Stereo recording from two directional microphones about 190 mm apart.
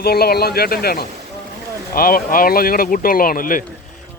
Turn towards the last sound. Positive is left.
turn(degrees=45)  # may be behind; listen again after turning